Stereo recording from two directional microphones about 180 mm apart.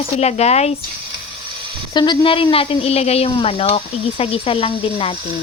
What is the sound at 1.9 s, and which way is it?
Speech, 25° left (ahead or behind).